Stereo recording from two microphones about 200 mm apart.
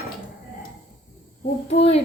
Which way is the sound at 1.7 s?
30° left (ahead or behind).